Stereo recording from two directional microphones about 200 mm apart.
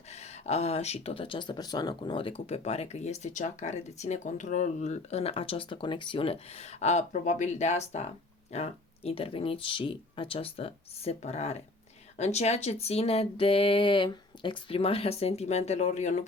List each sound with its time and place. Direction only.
0.1 s speech: 35° left (ahead or behind)